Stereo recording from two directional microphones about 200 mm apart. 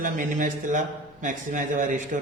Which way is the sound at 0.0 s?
40° right (ahead or behind).